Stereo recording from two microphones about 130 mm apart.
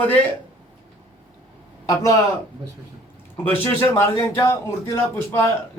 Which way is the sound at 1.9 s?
25° left (ahead or behind).